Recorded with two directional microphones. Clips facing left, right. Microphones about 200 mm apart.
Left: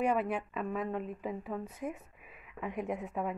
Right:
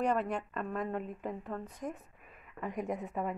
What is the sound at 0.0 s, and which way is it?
A woman's voice, 5° left (ahead or behind).